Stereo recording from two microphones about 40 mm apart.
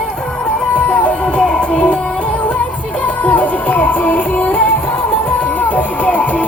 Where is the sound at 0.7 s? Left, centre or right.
Left.